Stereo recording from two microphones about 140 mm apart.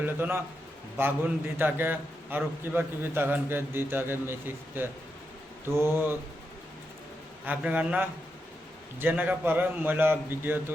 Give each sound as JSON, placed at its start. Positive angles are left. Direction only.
{"t": 0.0, "sound": "a man's voice", "side_deg": -15}
{"t": 1.5, "sound": "a man's voice", "side_deg": -15}
{"t": 7.4, "sound": "a man's voice", "side_deg": -10}